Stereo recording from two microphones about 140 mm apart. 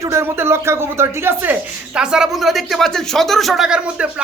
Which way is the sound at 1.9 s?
5° right (ahead or behind).